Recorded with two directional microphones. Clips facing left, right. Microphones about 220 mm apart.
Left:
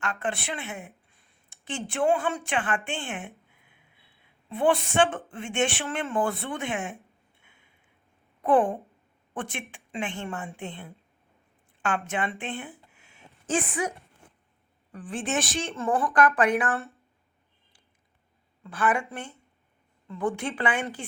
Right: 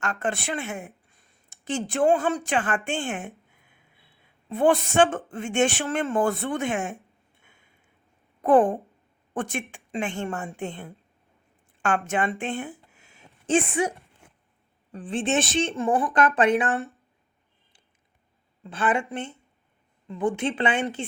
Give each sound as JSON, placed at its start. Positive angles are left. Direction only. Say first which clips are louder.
{"t": 0.0, "sound": "a sound", "louder": "right 3 dB", "side_deg": -45}
{"t": 1.9, "sound": "a woman's voice", "louder": "right 3 dB", "side_deg": -40}
{"t": 4.4, "sound": "a woman's voice", "louder": "right 3 dB", "side_deg": -45}
{"t": 8.4, "sound": "a woman's voice", "louder": "right 4 dB", "side_deg": -40}
{"t": 13.5, "sound": "a woman's voice", "louder": "right 5 dB", "side_deg": -25}
{"t": 14.9, "sound": "a woman's voice", "louder": "right 5 dB", "side_deg": -25}
{"t": 15.7, "sound": "a woman's voice", "louder": "left 2 dB", "side_deg": -15}
{"t": 18.6, "sound": "a woman's voice", "louder": "right 1 dB", "side_deg": -25}